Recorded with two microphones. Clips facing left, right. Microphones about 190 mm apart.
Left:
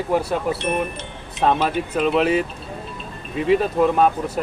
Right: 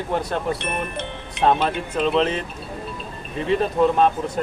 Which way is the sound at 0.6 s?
60° right (ahead or behind).